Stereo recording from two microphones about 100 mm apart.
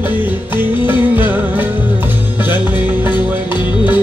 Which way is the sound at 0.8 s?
20° right (ahead or behind).